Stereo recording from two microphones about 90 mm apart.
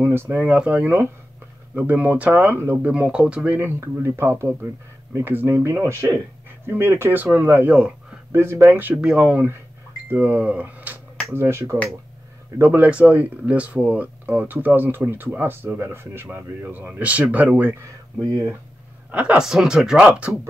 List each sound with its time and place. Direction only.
0.0 s speech: 25° right (ahead or behind)
2.9 s speech: 10° right (ahead or behind)
3.5 s speech: 25° right (ahead or behind)
8.9 s speech: 10° right (ahead or behind)
19.0 s speech: 15° right (ahead or behind)